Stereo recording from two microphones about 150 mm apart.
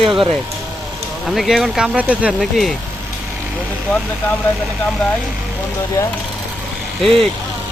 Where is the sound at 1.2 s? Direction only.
Centre (ahead or behind).